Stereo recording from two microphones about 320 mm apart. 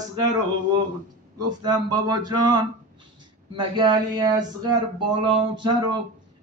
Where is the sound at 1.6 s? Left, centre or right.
Centre.